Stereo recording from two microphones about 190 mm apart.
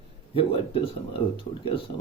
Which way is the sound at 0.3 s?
30° left (ahead or behind).